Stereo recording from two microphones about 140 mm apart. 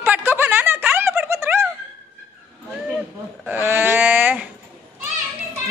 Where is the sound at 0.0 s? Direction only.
15° right (ahead or behind).